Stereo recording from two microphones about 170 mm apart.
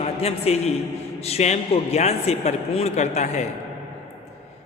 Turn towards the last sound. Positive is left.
turn(degrees=40)  # may be behind; listen again after turning